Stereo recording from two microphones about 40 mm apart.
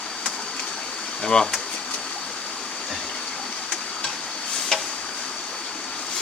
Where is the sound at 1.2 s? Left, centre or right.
Centre.